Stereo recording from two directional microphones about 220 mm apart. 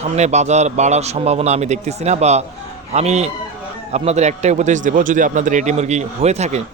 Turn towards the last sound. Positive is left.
turn(degrees=-30)  # may be behind; listen again after turning